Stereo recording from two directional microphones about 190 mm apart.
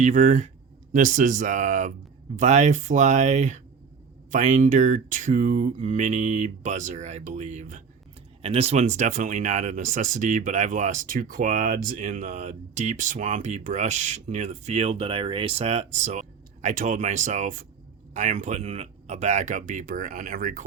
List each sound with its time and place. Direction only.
0.0 s speech: 40° right (ahead or behind)